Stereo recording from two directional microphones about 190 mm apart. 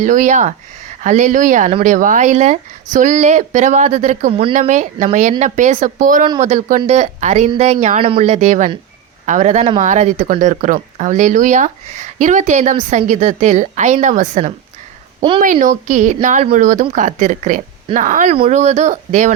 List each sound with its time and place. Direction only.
0.0 s speech: 40° right (ahead or behind)
15.6 s speech: 40° right (ahead or behind)